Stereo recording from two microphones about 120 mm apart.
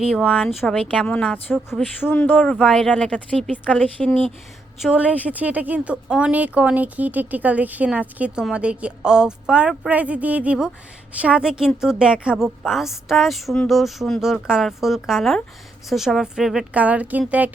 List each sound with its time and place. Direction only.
0.0 s a woman's voice: 5° right (ahead or behind)
0.7 s speech: 10° left (ahead or behind)
2.4 s speech: 5° left (ahead or behind)
4.8 s a woman's voice: 10° right (ahead or behind)